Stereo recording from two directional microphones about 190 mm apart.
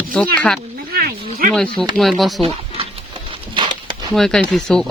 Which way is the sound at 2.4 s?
30° right (ahead or behind).